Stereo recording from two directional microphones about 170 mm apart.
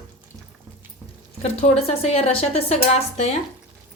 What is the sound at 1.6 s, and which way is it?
A woman's voice, 40° left (ahead or behind).